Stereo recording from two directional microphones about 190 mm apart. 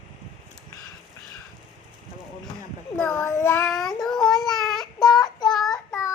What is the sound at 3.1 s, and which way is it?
Child singing, 15° left (ahead or behind).